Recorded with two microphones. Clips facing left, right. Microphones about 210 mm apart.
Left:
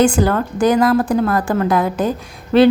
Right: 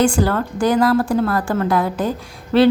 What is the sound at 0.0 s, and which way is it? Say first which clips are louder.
A woman's voice: left 2 dB; 20° left (ahead or behind).